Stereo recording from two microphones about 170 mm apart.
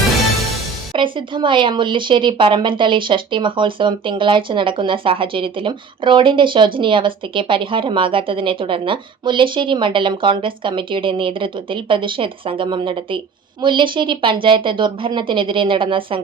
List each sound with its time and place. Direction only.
0.9 s speech: 30° right (ahead or behind)